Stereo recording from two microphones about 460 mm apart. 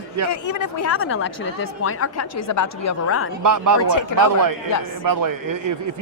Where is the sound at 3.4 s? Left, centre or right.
Right.